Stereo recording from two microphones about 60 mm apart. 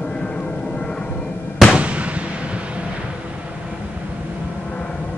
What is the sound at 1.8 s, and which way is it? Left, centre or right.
Fireworks, right.